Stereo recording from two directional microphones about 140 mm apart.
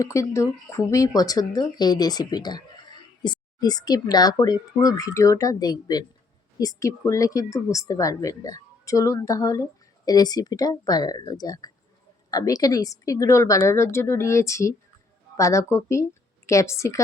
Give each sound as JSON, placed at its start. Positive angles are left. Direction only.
{"t": 0.0, "sound": "a woman's voice", "side_deg": 20}